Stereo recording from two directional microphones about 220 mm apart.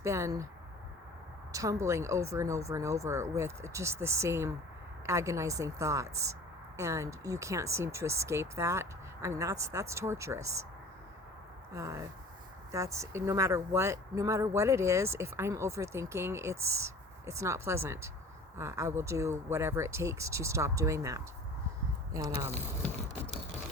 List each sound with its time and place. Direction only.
0.0 s speech: 15° right (ahead or behind)
1.5 s speech: 15° right (ahead or behind)
11.7 s speech: 15° right (ahead or behind)
22.8 s a sound: 5° left (ahead or behind)